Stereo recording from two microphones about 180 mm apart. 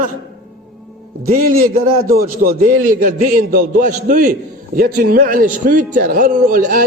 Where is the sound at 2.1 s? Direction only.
55° right (ahead or behind).